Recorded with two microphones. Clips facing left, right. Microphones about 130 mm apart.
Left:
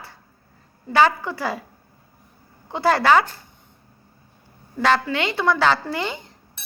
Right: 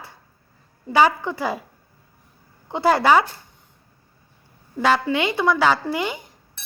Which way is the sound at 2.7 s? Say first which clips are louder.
Right 1 dB; 20° right (ahead or behind).